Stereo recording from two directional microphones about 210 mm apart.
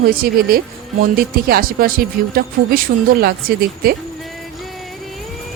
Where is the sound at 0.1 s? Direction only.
45° right (ahead or behind).